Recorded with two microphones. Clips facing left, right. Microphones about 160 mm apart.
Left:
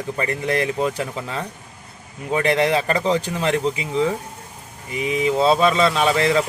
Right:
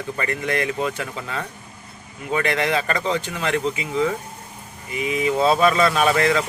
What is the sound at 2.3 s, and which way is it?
A man's voice, 30° left (ahead or behind).